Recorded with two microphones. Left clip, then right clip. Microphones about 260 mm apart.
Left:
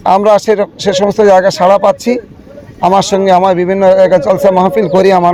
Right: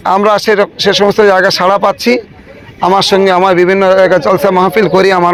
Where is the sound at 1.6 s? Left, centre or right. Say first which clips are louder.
Left 2 dB; right.